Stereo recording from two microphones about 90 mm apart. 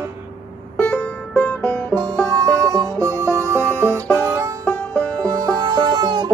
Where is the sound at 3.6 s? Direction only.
15° left (ahead or behind).